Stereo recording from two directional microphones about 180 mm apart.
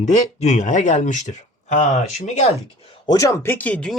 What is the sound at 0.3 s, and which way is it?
Speech, 40° left (ahead or behind).